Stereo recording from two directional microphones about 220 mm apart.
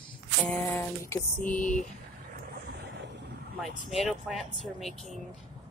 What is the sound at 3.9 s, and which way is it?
Speech, centre (ahead or behind).